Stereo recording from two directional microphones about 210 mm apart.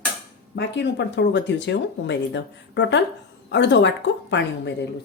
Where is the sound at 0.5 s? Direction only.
55° left (ahead or behind).